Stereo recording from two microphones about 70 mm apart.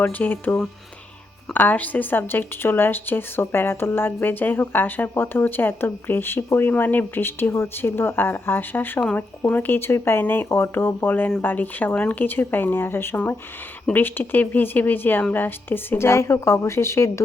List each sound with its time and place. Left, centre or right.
0.0 s speech: left
1.5 s speech: left